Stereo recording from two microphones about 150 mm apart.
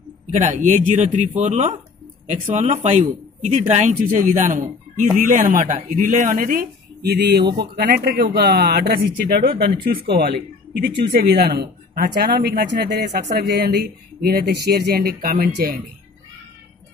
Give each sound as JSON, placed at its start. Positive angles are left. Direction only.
{"t": 0.3, "sound": "speech", "side_deg": -55}